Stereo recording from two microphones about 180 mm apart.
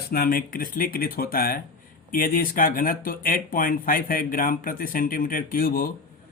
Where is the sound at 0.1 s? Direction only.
55° left (ahead or behind).